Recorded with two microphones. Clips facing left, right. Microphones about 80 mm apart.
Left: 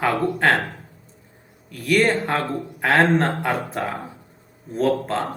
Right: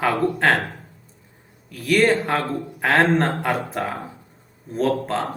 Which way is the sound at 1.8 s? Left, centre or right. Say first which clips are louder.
Right 1 dB; centre.